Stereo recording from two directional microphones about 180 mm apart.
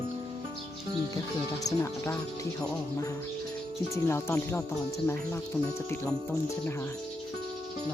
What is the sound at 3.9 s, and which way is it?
Speech, 15° left (ahead or behind).